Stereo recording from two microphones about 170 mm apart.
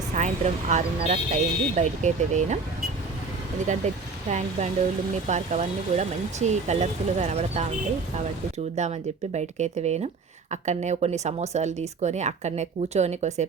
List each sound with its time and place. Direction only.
0.1 s speech: 45° right (ahead or behind)
3.7 s speech: 45° right (ahead or behind)